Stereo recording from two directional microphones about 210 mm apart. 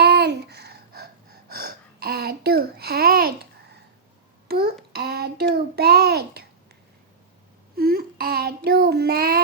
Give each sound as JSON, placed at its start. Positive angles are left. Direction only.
{"t": 0.0, "sound": "gasp", "side_deg": -50}
{"t": 4.4, "sound": "a sound", "side_deg": -45}
{"t": 7.8, "sound": "child singing", "side_deg": -45}